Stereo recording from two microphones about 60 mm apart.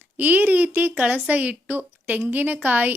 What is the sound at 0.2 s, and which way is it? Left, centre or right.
A woman's voice, right.